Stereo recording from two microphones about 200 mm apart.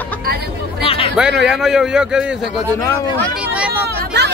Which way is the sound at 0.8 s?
30° left (ahead or behind).